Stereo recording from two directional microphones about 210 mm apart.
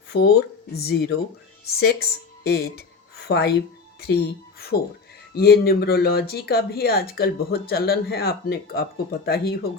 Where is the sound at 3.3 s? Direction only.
50° left (ahead or behind).